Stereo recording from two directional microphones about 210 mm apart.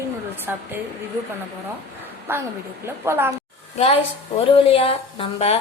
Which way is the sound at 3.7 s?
30° left (ahead or behind).